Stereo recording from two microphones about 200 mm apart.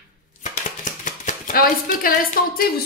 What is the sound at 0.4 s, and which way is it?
Speech, 40° left (ahead or behind).